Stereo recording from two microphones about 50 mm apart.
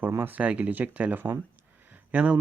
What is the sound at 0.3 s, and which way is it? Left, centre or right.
Speech, right.